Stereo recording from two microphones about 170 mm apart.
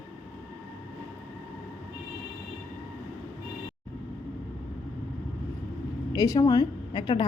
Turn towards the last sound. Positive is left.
turn(degrees=25)  # may be behind; listen again after turning